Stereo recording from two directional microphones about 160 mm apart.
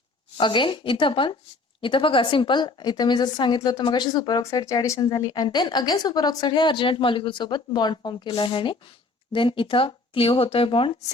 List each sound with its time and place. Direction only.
0.3 s a woman's voice: 30° left (ahead or behind)